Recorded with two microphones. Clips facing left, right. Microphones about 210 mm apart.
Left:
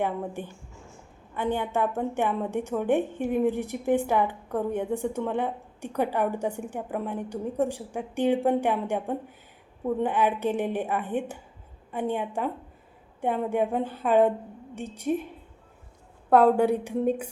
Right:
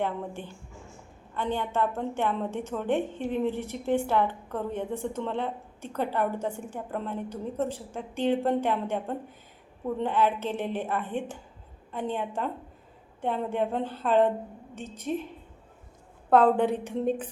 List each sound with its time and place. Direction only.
0.0 s a woman's voice: 15° left (ahead or behind)
16.3 s a woman's voice: 10° left (ahead or behind)